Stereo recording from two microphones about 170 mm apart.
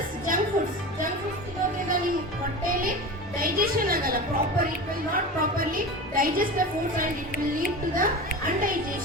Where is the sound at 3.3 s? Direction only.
60° right (ahead or behind).